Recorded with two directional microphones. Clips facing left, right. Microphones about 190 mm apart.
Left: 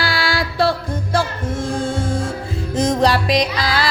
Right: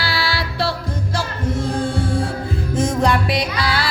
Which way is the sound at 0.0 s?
50° left (ahead or behind).